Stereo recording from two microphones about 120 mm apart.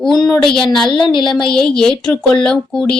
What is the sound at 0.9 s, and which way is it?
Speech, 40° left (ahead or behind).